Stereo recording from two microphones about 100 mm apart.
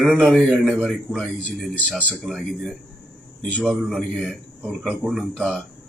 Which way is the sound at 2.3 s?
10° left (ahead or behind).